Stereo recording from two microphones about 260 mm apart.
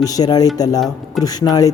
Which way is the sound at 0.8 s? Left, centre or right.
Centre.